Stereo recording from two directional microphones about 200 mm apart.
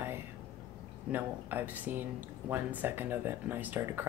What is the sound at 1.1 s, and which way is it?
Speech, 10° right (ahead or behind).